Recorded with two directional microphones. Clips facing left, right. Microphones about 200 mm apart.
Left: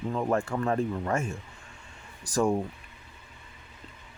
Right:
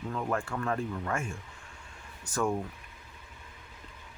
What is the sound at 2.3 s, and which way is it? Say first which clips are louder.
Speech: left 5 dB; 30° left (ahead or behind).